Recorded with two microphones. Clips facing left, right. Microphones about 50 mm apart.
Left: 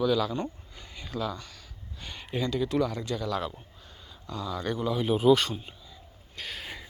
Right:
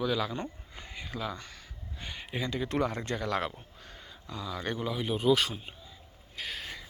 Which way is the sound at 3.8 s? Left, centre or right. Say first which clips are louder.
Right 2 dB; right.